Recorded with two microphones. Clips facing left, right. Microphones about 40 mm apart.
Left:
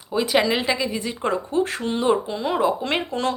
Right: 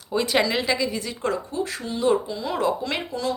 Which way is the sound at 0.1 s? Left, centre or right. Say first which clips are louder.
Left 2 dB; centre.